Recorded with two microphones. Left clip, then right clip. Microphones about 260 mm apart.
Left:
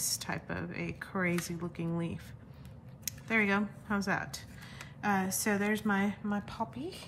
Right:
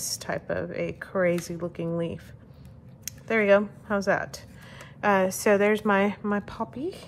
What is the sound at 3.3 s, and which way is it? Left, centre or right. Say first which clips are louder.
A woman's voice: right 10 dB; centre.